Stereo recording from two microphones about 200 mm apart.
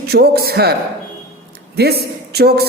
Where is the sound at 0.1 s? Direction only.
50° right (ahead or behind).